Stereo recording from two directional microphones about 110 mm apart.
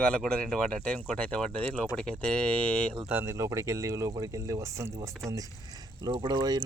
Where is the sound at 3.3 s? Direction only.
25° right (ahead or behind).